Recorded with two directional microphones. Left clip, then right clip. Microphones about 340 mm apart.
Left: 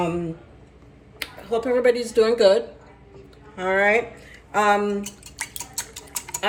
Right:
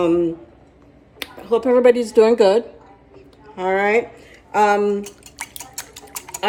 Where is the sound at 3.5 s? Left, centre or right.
Centre.